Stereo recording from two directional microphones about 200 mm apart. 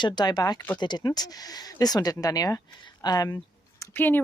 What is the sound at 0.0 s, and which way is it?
Speech, 20° left (ahead or behind).